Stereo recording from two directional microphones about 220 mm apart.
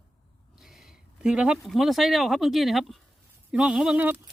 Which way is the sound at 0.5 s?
Centre (ahead or behind).